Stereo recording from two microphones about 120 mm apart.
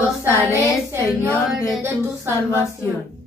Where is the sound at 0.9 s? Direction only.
20° right (ahead or behind).